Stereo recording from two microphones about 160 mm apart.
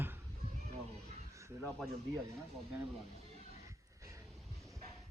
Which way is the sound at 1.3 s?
20° right (ahead or behind).